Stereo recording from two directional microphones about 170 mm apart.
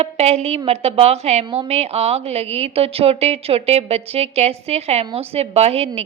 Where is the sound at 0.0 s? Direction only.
40° right (ahead or behind).